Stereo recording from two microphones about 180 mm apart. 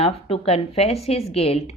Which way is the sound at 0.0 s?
35° left (ahead or behind).